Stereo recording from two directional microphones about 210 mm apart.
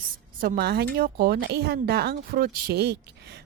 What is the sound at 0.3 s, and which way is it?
A woman's voice, 50° right (ahead or behind).